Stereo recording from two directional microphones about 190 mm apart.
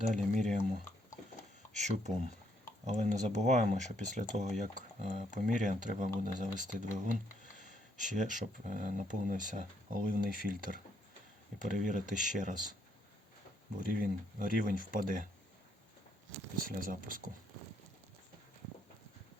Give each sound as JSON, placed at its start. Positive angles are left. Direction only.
{"t": 0.1, "sound": "speech", "side_deg": -40}
{"t": 13.7, "sound": "speech", "side_deg": -45}
{"t": 16.6, "sound": "speech", "side_deg": -45}